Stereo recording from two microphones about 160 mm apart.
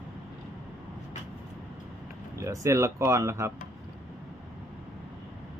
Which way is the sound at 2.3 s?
20° right (ahead or behind).